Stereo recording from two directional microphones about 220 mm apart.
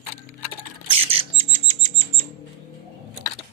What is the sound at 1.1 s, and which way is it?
Bird, 25° right (ahead or behind).